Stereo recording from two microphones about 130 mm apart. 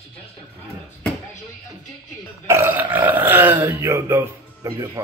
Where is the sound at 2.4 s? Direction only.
20° right (ahead or behind).